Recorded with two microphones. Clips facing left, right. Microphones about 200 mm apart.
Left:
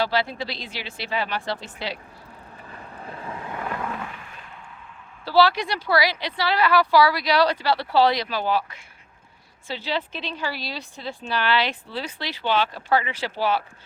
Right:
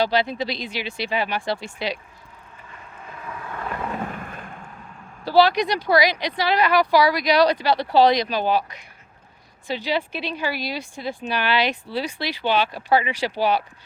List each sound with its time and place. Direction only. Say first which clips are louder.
0.0 s a woman's voice: right 3 dB; 15° right (ahead or behind)
2.6 s vehicle: left 3 dB; 35° left (ahead or behind)
4.0 s fireworks: right 7 dB; 50° right (ahead or behind)
5.2 s a woman's voice: right 2 dB; 15° right (ahead or behind)